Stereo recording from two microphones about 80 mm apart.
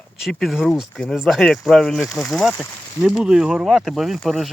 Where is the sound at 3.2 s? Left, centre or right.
Centre.